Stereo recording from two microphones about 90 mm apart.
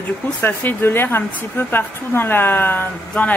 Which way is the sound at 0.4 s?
25° left (ahead or behind).